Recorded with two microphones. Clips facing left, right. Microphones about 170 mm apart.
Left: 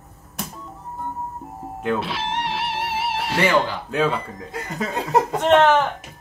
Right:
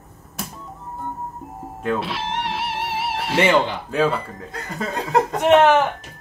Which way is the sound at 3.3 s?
25° right (ahead or behind).